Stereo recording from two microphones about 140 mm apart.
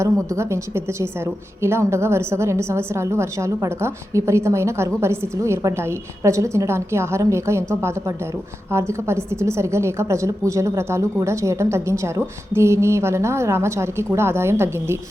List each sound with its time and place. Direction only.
0.3 s a woman's voice: 20° right (ahead or behind)